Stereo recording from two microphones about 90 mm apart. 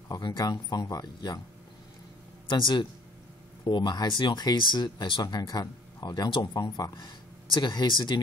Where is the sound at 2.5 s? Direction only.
60° left (ahead or behind).